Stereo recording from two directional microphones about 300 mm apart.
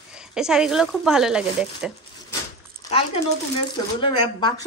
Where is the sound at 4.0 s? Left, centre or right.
Centre.